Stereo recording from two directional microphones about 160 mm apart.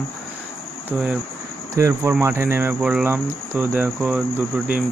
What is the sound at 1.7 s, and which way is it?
Speech, 20° right (ahead or behind).